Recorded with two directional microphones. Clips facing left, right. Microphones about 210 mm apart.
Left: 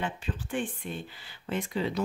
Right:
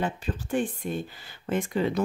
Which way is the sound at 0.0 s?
40° right (ahead or behind).